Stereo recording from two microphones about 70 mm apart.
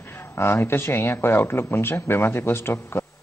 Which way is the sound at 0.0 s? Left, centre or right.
Left.